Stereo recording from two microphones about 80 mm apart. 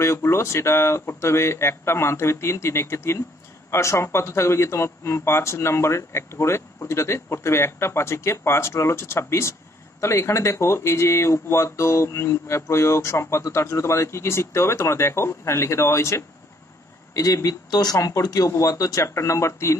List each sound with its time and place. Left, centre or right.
0.0 s speech: left